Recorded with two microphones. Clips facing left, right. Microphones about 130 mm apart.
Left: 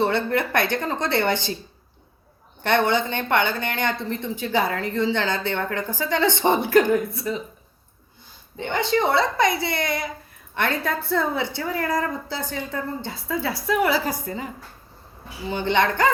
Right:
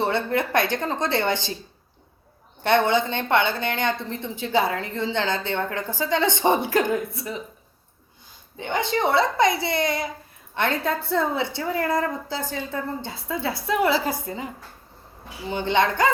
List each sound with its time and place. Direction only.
0.0 s a woman's voice: 15° right (ahead or behind)
2.6 s a woman's voice: 20° right (ahead or behind)
8.5 s a woman's voice: 15° right (ahead or behind)
15.4 s speech: 15° right (ahead or behind)